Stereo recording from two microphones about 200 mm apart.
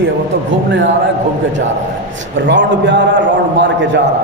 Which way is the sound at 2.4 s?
65° right (ahead or behind).